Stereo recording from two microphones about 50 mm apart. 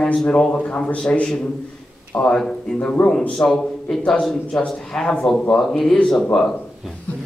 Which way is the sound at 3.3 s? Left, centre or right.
Centre.